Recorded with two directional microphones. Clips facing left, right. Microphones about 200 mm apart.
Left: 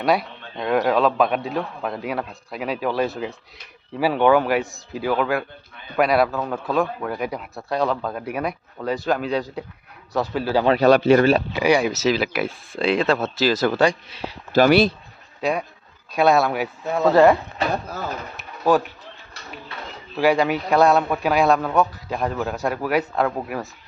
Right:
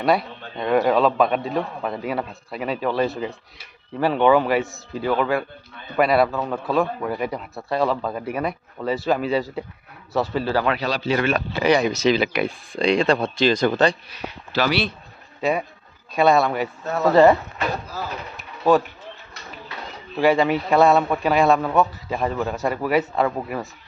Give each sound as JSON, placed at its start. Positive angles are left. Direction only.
{"t": 0.0, "sound": "a man's voice", "side_deg": 0}
{"t": 10.8, "sound": "speech", "side_deg": 55}
{"t": 11.2, "sound": "speech", "side_deg": 35}
{"t": 11.5, "sound": "a man's voice", "side_deg": 10}
{"t": 14.1, "sound": "speech", "side_deg": 30}
{"t": 14.5, "sound": "speech", "side_deg": 50}
{"t": 15.4, "sound": "a man's voice", "side_deg": 0}
{"t": 18.6, "sound": "a man's voice", "side_deg": 5}
{"t": 20.1, "sound": "a man's voice", "side_deg": 0}